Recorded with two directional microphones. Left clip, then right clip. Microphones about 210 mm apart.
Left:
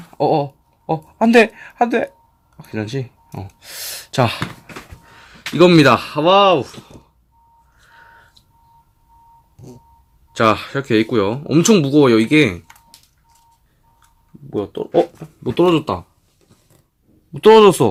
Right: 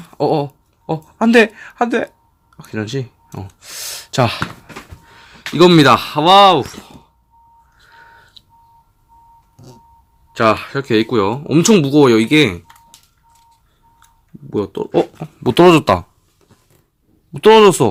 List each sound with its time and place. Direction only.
0.1 s speech: 10° right (ahead or behind)
2.6 s a sound: 5° right (ahead or behind)
5.5 s speech: centre (ahead or behind)
7.8 s a sound: 5° right (ahead or behind)
10.3 s speech: 5° left (ahead or behind)
14.6 s speech: 25° right (ahead or behind)
15.4 s speech: 40° right (ahead or behind)
17.3 s speech: 5° right (ahead or behind)